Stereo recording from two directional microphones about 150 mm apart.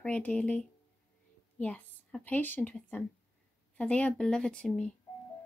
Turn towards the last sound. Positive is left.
turn(degrees=5)  # may be behind; listen again after turning